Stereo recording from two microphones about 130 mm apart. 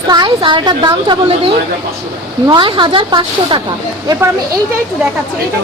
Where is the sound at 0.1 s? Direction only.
35° right (ahead or behind).